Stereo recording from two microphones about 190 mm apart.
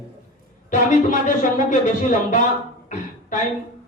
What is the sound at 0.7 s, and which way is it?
Speech, 40° left (ahead or behind).